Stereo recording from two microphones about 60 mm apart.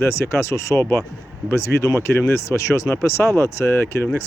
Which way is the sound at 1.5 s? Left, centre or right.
Left.